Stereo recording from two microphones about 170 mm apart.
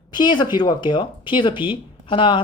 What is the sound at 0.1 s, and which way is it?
A woman's voice, 25° left (ahead or behind).